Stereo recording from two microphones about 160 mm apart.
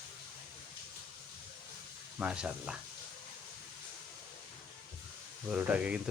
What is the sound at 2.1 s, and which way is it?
Speech, 5° right (ahead or behind).